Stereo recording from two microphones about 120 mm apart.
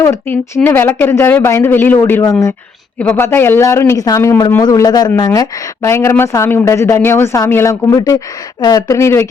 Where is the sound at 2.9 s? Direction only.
15° left (ahead or behind).